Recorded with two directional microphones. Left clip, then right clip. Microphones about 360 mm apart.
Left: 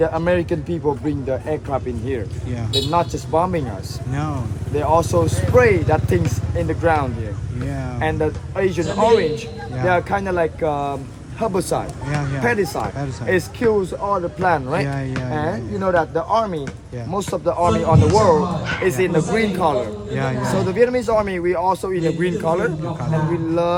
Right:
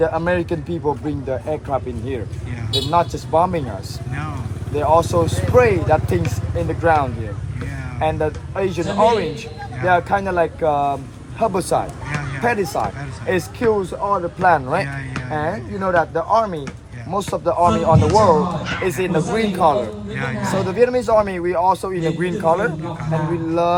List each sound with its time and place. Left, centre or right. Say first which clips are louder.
0.0 s speech: even; centre
4.7 s speech: right 1 dB; centre